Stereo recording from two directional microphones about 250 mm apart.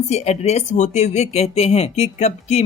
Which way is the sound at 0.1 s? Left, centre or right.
Left.